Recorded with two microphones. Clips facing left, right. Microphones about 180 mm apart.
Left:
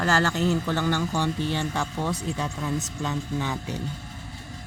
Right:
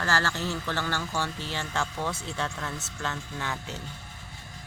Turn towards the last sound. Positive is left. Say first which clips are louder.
# left 6 dB
turn(degrees=15)  # may be behind; listen again after turning